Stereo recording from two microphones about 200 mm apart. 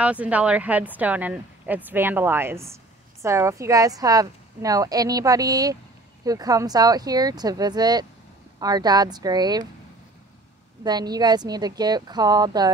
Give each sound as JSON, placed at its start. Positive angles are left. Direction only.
{"t": 0.0, "sound": "a woman's voice", "side_deg": -5}
{"t": 10.8, "sound": "a woman's voice", "side_deg": -20}